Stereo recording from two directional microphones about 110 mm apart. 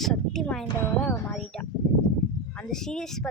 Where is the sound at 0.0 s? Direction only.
5° left (ahead or behind).